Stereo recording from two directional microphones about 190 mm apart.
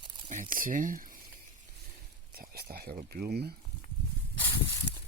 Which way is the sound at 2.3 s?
55° right (ahead or behind).